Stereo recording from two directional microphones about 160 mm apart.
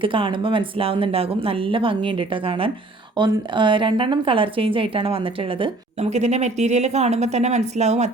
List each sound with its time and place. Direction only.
0.0 s a woman's voice: 35° right (ahead or behind)